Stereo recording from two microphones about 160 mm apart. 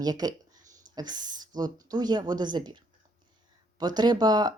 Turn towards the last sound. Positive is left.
turn(degrees=-25)  # may be behind; listen again after turning